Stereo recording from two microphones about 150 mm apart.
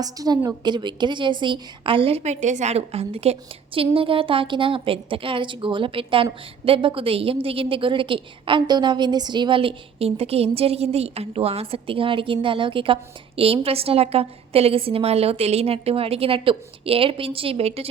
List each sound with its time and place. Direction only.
0.0 s a woman's voice: 25° right (ahead or behind); by 17.8 s 40° right (ahead or behind)